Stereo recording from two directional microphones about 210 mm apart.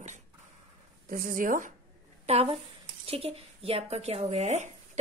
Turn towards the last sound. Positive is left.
turn(degrees=-35)  # may be behind; listen again after turning